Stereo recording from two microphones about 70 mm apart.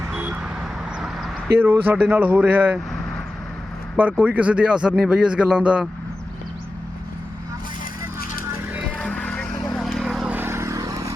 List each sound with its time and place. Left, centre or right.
0.9 s vehicle: centre
1.5 s speech: right
4.1 s speech: centre
9.0 s vehicle: centre
9.7 s vehicle: centre
10.2 s vehicle: right
10.5 s vehicle: right